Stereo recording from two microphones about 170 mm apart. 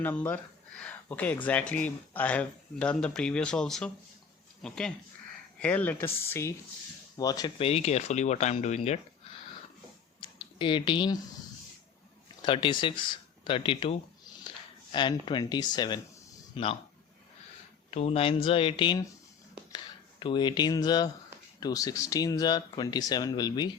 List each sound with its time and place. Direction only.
0.0 s speech: 10° left (ahead or behind)
0.8 s a sound: 10° left (ahead or behind)
1.5 s speech: 10° left (ahead or behind)
7.6 s speech: 35° left (ahead or behind)
10.2 s a sound: 30° left (ahead or behind)
12.4 s speech: 30° left (ahead or behind)
17.9 s speech: 40° left (ahead or behind)